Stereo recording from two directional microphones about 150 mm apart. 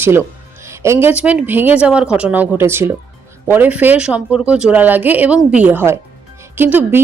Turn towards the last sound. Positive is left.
turn(degrees=-15)  # may be behind; listen again after turning